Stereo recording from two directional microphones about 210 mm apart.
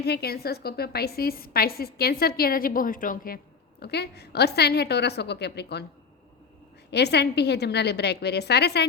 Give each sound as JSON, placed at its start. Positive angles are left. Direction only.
{"t": 0.0, "sound": "a woman's voice", "side_deg": 50}
{"t": 6.9, "sound": "a woman's voice", "side_deg": 50}